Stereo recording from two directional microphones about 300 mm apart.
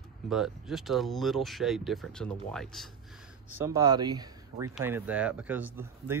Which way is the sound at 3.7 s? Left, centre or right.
Centre.